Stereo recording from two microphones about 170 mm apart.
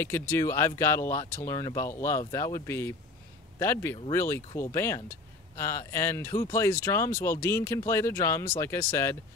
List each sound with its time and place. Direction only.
0.0 s speech: 15° left (ahead or behind)